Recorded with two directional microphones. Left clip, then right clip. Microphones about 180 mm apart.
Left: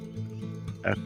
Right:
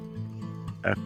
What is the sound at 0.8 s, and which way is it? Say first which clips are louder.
Speech: right 1 dB; 5° right (ahead or behind).